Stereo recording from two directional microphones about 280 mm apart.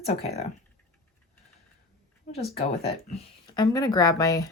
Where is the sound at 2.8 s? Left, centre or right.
Left.